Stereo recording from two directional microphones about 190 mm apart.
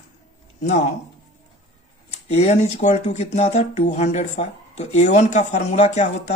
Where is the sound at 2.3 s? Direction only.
35° left (ahead or behind).